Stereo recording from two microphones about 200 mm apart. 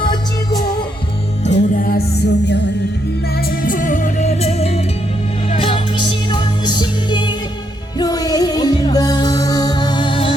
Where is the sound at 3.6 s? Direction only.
40° left (ahead or behind).